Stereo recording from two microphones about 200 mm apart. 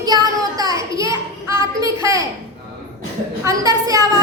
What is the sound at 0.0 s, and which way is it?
Child singing, 20° right (ahead or behind).